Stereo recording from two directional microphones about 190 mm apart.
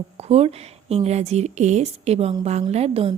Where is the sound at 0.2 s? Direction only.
30° right (ahead or behind).